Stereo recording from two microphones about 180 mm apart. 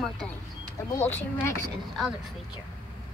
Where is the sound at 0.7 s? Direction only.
15° left (ahead or behind).